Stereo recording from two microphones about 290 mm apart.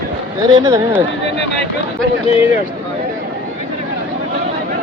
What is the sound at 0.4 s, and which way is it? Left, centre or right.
Speech, centre.